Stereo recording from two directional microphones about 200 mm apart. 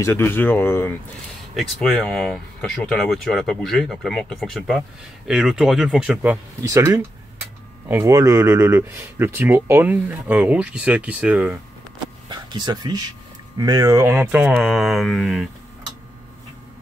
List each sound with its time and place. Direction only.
0.0 s speech: 10° left (ahead or behind); by 11.6 s 10° right (ahead or behind)
12.3 s speech: 20° right (ahead or behind); by 15.4 s centre (ahead or behind)